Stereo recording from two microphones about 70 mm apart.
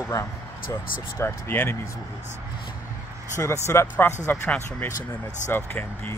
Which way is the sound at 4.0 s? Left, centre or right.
Left.